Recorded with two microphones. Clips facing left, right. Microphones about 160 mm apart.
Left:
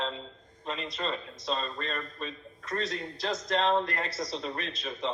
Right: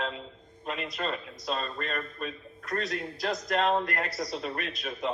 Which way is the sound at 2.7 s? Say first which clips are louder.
Right 1 dB; centre (ahead or behind).